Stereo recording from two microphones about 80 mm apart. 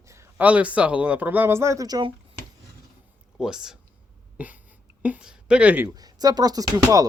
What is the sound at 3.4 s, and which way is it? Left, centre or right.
Speech, centre.